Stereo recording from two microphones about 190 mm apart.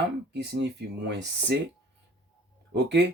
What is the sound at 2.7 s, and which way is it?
Speech, 65° right (ahead or behind).